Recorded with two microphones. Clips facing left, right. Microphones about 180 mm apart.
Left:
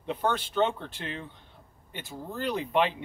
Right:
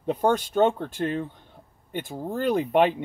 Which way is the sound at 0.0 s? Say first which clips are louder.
Right 6 dB; 45° right (ahead or behind).